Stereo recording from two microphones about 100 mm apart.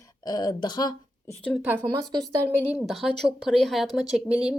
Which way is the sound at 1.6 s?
20° right (ahead or behind).